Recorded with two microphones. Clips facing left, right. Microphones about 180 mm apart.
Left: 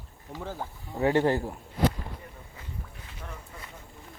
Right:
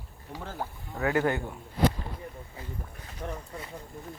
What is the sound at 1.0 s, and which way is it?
Speech, 30° left (ahead or behind).